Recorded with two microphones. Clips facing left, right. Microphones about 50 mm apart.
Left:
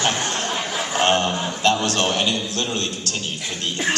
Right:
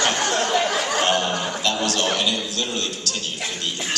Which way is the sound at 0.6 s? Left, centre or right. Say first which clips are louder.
Right 3 dB; right.